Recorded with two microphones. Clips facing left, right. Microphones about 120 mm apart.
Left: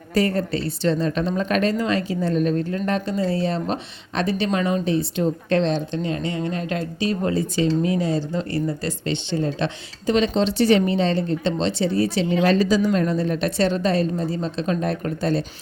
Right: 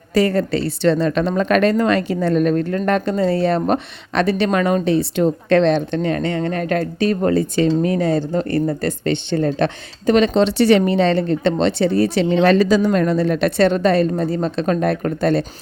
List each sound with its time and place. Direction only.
0.1 s a woman's voice: 90° right; by 15.4 s 65° right (ahead or behind)